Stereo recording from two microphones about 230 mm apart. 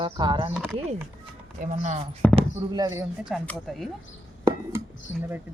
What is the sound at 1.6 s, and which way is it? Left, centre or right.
Speech, right.